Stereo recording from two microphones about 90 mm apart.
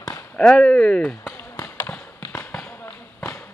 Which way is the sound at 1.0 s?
25° left (ahead or behind).